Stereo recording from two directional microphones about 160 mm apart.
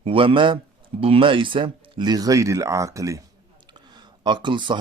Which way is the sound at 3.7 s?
25° right (ahead or behind).